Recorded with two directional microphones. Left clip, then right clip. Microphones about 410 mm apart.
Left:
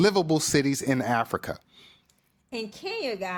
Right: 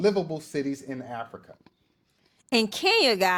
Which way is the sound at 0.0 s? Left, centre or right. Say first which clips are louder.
Left 3 dB; left.